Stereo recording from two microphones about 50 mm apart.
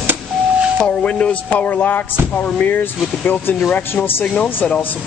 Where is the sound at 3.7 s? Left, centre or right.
Left.